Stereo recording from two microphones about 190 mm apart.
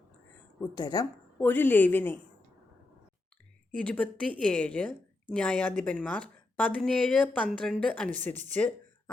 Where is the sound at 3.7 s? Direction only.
5° left (ahead or behind).